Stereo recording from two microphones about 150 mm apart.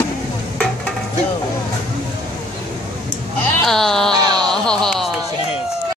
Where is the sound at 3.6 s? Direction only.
5° left (ahead or behind).